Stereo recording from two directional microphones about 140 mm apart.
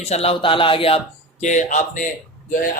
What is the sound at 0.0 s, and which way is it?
Speech, 45° left (ahead or behind).